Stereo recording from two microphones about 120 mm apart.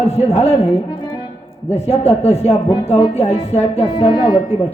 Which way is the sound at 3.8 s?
40° left (ahead or behind).